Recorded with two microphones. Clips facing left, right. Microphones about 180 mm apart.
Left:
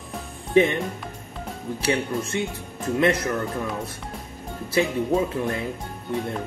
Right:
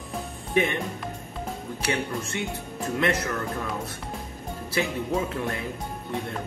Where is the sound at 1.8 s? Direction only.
25° left (ahead or behind).